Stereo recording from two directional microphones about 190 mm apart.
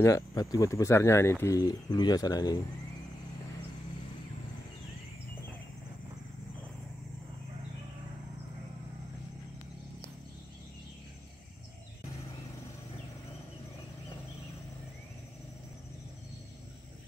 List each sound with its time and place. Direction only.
0.0 s speech: 15° left (ahead or behind)